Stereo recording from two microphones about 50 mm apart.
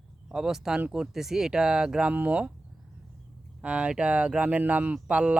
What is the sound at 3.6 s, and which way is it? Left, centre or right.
Speech, right.